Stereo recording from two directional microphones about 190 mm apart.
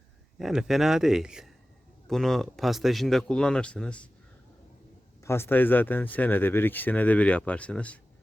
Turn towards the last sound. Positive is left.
turn(degrees=5)  # may be behind; listen again after turning